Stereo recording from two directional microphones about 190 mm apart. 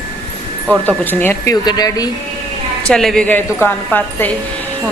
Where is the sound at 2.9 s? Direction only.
5° left (ahead or behind).